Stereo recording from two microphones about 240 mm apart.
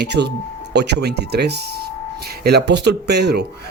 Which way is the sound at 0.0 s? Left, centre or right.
Right.